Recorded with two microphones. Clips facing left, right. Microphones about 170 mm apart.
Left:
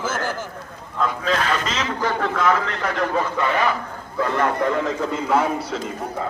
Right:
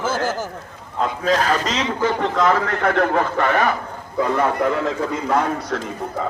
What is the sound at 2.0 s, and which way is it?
Speech, 20° right (ahead or behind).